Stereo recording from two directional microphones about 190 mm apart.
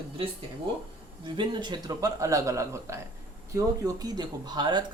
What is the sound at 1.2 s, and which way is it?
Speech, 25° right (ahead or behind).